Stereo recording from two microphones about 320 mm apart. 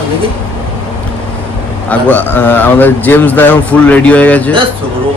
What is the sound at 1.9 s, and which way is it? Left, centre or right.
Speech, centre.